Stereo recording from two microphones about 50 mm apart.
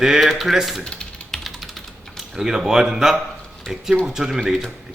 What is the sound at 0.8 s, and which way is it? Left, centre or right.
Typing, centre.